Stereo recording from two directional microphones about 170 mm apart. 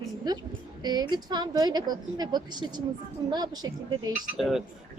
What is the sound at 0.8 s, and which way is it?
A woman's voice, 25° right (ahead or behind).